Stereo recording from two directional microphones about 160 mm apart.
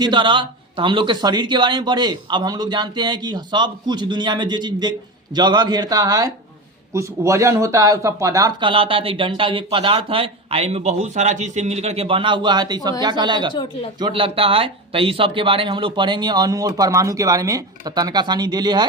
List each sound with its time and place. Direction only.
0.0 s speech: 30° right (ahead or behind)
13.5 s speech: 30° left (ahead or behind)
14.0 s speech: 35° right (ahead or behind)